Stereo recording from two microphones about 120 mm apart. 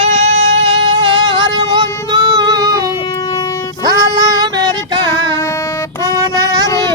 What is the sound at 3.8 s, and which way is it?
Child singing, 30° right (ahead or behind).